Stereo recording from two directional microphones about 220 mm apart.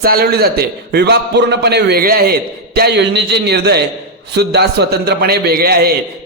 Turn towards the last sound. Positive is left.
turn(degrees=-45)  # may be behind; listen again after turning